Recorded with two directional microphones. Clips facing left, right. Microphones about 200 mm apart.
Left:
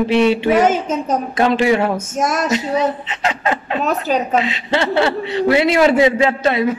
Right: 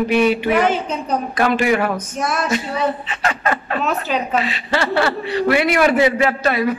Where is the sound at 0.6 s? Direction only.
45° left (ahead or behind).